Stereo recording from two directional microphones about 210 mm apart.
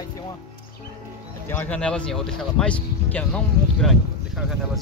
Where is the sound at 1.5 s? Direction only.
10° left (ahead or behind).